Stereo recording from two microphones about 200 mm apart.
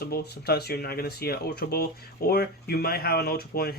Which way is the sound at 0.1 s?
50° left (ahead or behind).